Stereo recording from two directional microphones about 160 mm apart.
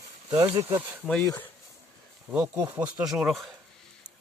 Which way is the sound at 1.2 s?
20° left (ahead or behind).